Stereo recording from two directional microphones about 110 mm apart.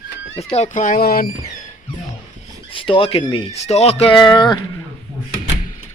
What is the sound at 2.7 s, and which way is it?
Speech, 55° left (ahead or behind).